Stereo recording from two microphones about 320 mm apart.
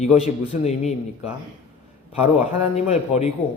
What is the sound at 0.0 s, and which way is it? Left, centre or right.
Speech, centre.